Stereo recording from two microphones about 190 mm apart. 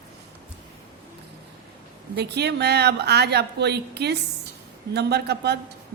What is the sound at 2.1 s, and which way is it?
Speech, 60° right (ahead or behind).